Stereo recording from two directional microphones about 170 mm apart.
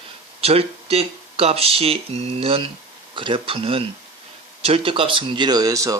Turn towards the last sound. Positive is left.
turn(degrees=-20)  # may be behind; listen again after turning